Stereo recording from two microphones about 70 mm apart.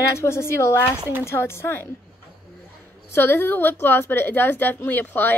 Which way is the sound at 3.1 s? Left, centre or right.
Left.